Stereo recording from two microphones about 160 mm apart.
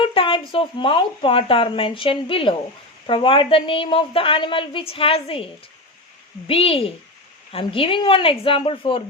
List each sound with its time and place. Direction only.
0.0 s speech: 35° left (ahead or behind)
6.5 s speech: 35° left (ahead or behind)